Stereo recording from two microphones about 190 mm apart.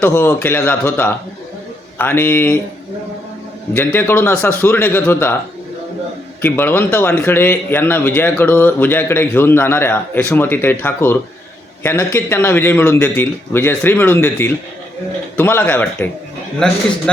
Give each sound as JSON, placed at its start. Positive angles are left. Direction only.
{"t": 0.0, "sound": "a man's voice", "side_deg": 10}
{"t": 3.8, "sound": "a man's voice", "side_deg": 10}
{"t": 6.4, "sound": "a man's voice", "side_deg": 10}